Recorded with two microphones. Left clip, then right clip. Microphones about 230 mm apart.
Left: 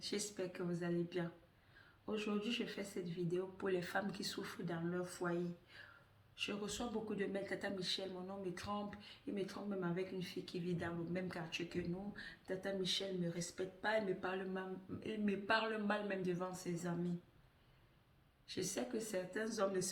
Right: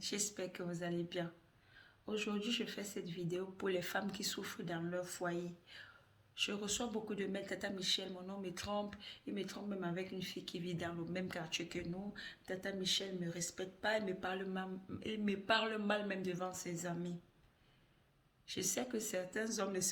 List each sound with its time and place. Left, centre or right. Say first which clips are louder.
0.0 s a man's voice: right 1 dB; right
18.4 s a man's voice: right 2 dB; right